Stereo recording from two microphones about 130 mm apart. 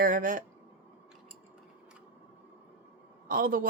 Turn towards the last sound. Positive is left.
turn(degrees=-90)